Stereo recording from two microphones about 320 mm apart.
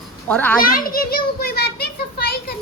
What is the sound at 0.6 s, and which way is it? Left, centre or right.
A child's voice, left.